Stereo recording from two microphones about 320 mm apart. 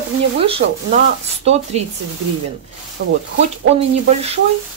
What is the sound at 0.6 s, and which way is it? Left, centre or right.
Speech, right.